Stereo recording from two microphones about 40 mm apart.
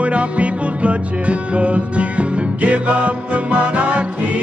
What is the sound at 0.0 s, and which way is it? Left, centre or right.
Music, right.